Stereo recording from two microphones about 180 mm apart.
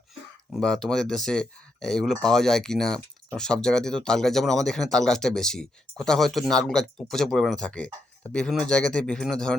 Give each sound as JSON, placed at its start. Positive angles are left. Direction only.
{"t": 0.5, "sound": "speech", "side_deg": 5}